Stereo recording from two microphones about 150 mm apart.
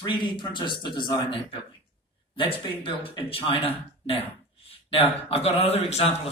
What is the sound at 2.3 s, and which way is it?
Speech, 35° left (ahead or behind).